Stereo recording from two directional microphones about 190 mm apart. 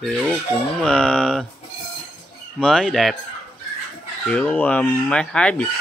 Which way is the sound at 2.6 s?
5° left (ahead or behind).